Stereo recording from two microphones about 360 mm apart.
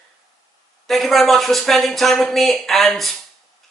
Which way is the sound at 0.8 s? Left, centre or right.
Centre.